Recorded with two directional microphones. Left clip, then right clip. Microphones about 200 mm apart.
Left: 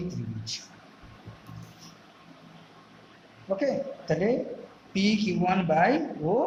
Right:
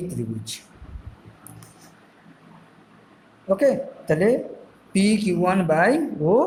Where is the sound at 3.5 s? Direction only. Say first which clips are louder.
Right 8 dB; 35° right (ahead or behind).